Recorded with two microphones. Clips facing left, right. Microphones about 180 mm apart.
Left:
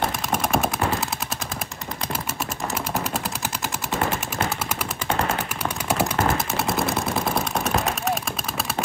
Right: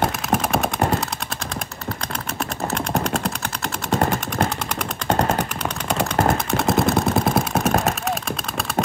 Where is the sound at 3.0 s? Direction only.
5° left (ahead or behind).